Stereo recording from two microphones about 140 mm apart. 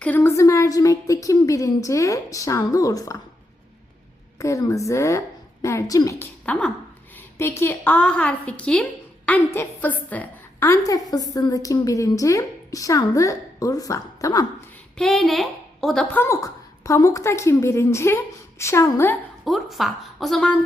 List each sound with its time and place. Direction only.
0.0 s a woman's voice: 15° left (ahead or behind)
4.4 s a woman's voice: 25° left (ahead or behind)
6.4 s a woman's voice: 10° left (ahead or behind)
10.7 s a woman's voice: 25° left (ahead or behind)
14.9 s a woman's voice: 5° left (ahead or behind)
16.1 s a woman's voice: 20° left (ahead or behind)
19.5 s a woman's voice: centre (ahead or behind)